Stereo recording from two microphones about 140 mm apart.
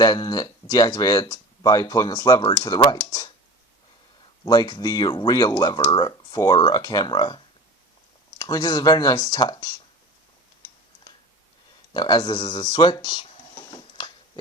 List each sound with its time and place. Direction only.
0.0 s speech: 30° left (ahead or behind)
4.4 s speech: 30° left (ahead or behind)
11.9 s speech: 30° left (ahead or behind)